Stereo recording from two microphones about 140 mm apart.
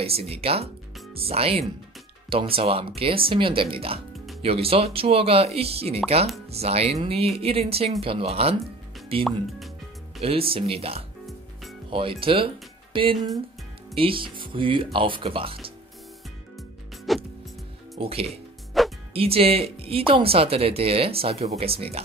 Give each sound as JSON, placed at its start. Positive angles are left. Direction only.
{"t": 0.0, "sound": "speech", "side_deg": -45}
{"t": 9.2, "sound": "speech", "side_deg": 0}
{"t": 10.2, "sound": "speech", "side_deg": -40}
{"t": 16.5, "sound": "music", "side_deg": 0}
{"t": 17.9, "sound": "speech", "side_deg": -45}
{"t": 18.8, "sound": "music", "side_deg": 0}
{"t": 19.1, "sound": "speech", "side_deg": -45}